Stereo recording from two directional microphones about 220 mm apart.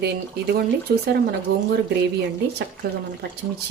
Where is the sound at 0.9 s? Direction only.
50° right (ahead or behind).